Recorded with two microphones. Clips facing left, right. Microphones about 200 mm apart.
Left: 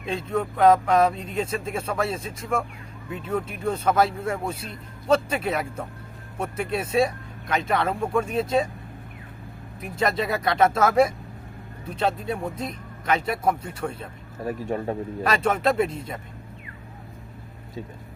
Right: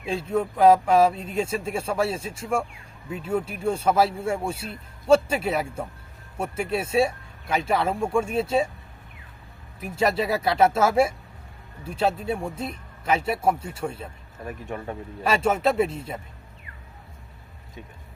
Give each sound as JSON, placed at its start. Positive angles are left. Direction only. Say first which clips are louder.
{"t": 0.3, "sound": "speech", "louder": "right 1 dB", "side_deg": -10}
{"t": 2.1, "sound": "speech", "louder": "right 1 dB", "side_deg": -30}
{"t": 3.1, "sound": "speech", "louder": "right 1 dB", "side_deg": -10}
{"t": 10.0, "sound": "speech", "louder": "right 1 dB", "side_deg": -10}
{"t": 14.4, "sound": "speech", "louder": "left 6 dB", "side_deg": 35}
{"t": 15.4, "sound": "speech", "louder": "even", "side_deg": -5}